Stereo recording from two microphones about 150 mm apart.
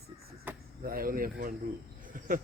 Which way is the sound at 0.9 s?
70° right (ahead or behind).